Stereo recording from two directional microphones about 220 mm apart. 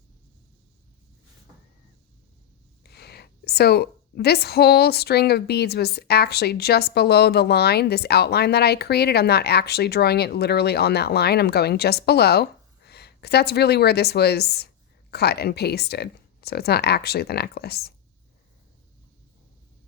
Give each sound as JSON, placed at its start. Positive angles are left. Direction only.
{"t": 2.8, "sound": "a woman's voice", "side_deg": 45}